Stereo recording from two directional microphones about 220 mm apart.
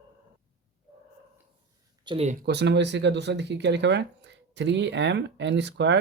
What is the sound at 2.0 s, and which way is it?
Speech, 30° right (ahead or behind).